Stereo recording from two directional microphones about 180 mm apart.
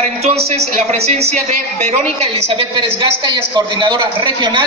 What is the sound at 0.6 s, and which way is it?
A woman's voice, 35° right (ahead or behind).